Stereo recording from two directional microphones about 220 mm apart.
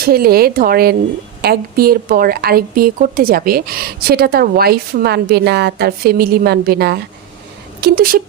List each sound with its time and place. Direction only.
0.0 s speech: 45° right (ahead or behind)